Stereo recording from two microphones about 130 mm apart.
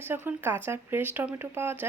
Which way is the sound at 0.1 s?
15° right (ahead or behind).